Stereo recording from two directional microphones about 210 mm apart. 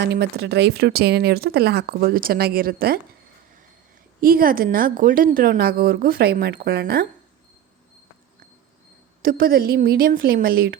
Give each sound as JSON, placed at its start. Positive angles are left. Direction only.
{"t": 0.0, "sound": "speech", "side_deg": -55}
{"t": 4.2, "sound": "speech", "side_deg": -45}
{"t": 9.2, "sound": "speech", "side_deg": -45}